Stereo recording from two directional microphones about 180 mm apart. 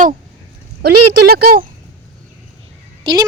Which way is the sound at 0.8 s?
65° right (ahead or behind).